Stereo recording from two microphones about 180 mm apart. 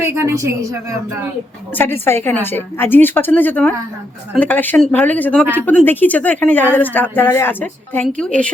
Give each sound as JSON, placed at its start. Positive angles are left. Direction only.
{"t": 0.2, "sound": "a woman's voice", "side_deg": -15}
{"t": 1.7, "sound": "a woman's voice", "side_deg": 10}